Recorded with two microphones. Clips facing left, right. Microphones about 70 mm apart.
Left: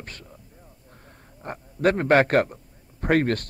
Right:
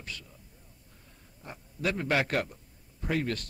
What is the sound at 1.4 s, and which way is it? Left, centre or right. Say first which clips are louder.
A man's voice: left 11 dB; left.